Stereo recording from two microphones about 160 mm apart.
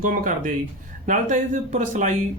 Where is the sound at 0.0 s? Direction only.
55° right (ahead or behind).